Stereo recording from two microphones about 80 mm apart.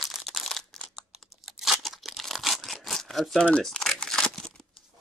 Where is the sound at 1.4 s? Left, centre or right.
Centre.